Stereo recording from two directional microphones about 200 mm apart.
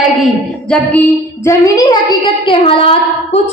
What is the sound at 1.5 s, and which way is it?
Child singing, 15° left (ahead or behind).